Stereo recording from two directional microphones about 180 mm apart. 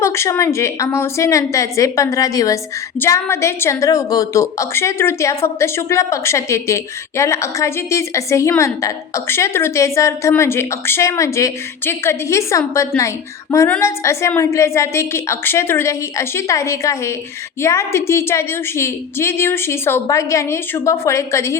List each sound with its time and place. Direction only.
0.0 s a woman's voice: 15° left (ahead or behind)